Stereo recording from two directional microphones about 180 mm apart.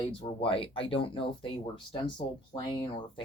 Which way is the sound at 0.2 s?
30° left (ahead or behind).